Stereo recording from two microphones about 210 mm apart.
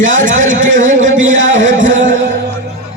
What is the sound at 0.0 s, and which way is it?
A man's voice, 65° right (ahead or behind).